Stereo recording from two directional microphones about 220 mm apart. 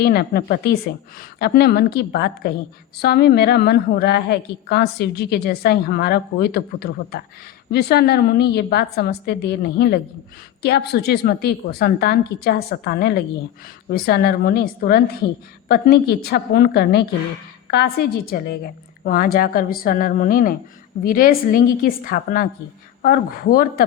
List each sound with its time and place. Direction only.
0.0 s a woman's voice: 45° left (ahead or behind)